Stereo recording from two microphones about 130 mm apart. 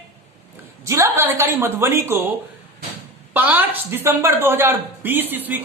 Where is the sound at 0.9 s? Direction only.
20° right (ahead or behind).